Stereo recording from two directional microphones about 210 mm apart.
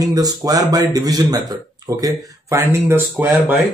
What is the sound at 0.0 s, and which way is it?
Speech, 15° right (ahead or behind).